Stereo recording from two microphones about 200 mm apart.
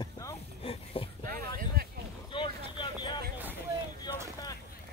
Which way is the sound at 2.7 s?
25° left (ahead or behind).